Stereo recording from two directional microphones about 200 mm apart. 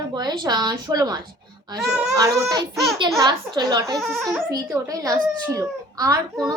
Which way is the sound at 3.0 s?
15° right (ahead or behind).